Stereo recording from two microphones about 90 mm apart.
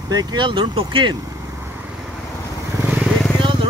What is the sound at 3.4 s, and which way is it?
Vehicle, 65° right (ahead or behind).